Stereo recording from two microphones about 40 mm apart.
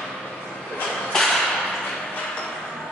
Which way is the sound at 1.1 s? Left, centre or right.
Centre.